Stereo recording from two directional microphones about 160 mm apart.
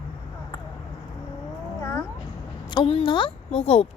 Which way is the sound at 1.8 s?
15° left (ahead or behind).